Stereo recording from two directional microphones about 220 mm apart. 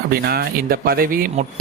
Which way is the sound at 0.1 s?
45° right (ahead or behind).